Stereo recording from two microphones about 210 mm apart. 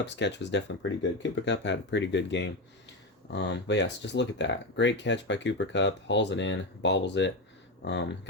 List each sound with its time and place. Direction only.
0.0 s speech: 55° left (ahead or behind)